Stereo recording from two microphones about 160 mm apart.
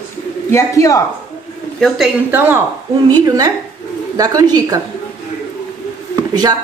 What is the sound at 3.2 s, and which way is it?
A woman's voice, 20° right (ahead or behind).